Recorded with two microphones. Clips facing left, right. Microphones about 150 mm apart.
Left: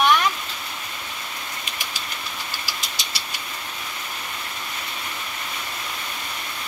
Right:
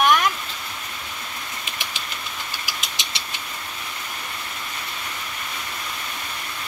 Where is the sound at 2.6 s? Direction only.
20° right (ahead or behind).